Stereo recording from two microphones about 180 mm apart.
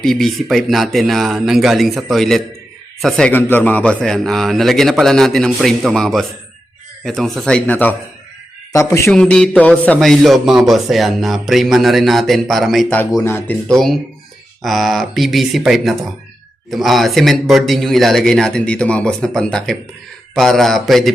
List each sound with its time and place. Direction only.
0.0 s a man's voice: centre (ahead or behind)
9.0 s a man's voice: 5° left (ahead or behind)